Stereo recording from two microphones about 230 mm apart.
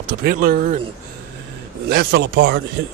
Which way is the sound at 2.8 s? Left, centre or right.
Right.